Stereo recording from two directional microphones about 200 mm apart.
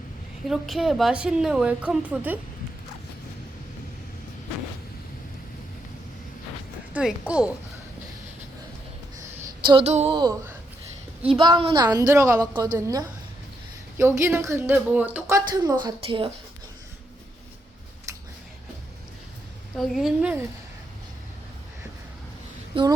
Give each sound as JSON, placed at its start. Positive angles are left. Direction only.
{"t": 0.4, "sound": "a woman's voice", "side_deg": 0}
{"t": 6.9, "sound": "speech", "side_deg": -5}
{"t": 9.6, "sound": "a woman's voice", "side_deg": -30}
{"t": 15.6, "sound": "a woman's voice", "side_deg": -20}
{"t": 19.7, "sound": "a woman's voice", "side_deg": 0}
{"t": 22.7, "sound": "a sound", "side_deg": -25}